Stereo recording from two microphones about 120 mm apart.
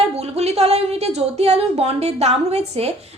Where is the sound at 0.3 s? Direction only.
60° right (ahead or behind).